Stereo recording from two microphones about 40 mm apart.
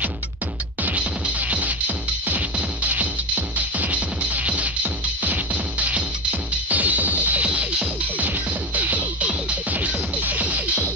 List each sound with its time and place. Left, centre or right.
0.8 s music: right